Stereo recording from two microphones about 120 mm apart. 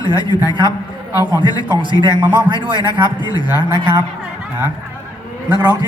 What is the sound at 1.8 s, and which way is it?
Speech, 40° right (ahead or behind).